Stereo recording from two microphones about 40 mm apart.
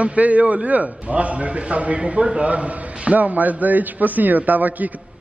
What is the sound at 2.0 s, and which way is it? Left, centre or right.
Speech, centre.